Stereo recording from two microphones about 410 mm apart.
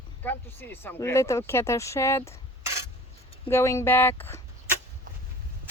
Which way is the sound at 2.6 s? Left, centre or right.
Centre.